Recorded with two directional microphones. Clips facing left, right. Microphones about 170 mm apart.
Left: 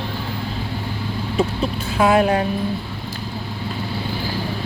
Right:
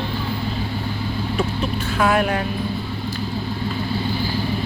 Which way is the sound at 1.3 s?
25° left (ahead or behind).